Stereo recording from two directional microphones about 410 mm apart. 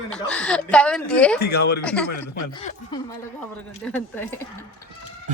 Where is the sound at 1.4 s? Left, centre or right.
Left.